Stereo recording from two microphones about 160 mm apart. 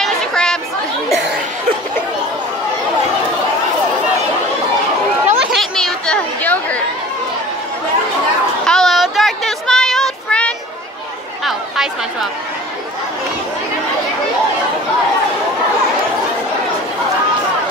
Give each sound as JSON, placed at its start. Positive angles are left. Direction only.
{"t": 0.0, "sound": "chatter", "side_deg": 5}
{"t": 5.3, "sound": "chatter", "side_deg": -5}
{"t": 8.6, "sound": "child singing", "side_deg": 0}
{"t": 11.4, "sound": "chatter", "side_deg": 0}